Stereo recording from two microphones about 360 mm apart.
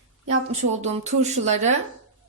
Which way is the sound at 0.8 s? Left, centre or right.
Centre.